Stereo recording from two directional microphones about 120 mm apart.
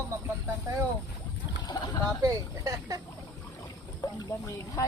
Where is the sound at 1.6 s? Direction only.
35° left (ahead or behind).